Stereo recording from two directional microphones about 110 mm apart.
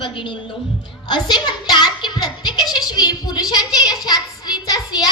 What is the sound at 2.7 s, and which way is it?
A woman's voice, 40° left (ahead or behind).